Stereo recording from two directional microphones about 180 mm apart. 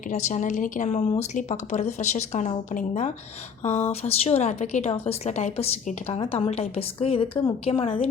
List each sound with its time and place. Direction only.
0.1 s a woman's voice: 45° left (ahead or behind)